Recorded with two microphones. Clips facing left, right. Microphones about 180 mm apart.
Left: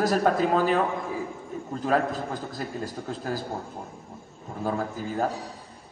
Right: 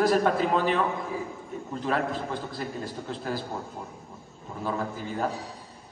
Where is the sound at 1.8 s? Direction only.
40° left (ahead or behind).